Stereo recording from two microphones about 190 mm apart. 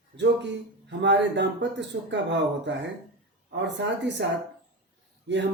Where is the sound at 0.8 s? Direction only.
70° right (ahead or behind).